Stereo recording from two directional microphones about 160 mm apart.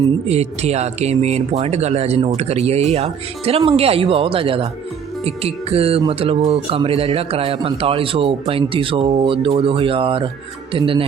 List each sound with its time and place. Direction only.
0.3 s speech: 45° right (ahead or behind)